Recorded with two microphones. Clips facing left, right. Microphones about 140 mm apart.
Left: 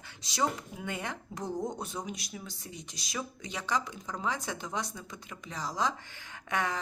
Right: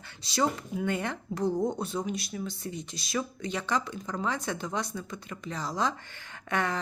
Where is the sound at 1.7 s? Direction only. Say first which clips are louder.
Right 6 dB; 15° left (ahead or behind).